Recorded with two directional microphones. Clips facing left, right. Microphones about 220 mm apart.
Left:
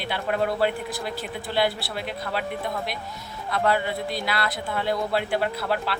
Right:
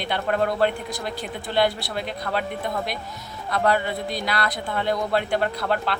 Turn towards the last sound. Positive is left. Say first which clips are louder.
# right 2 dB
turn(degrees=5)  # may be behind; listen again after turning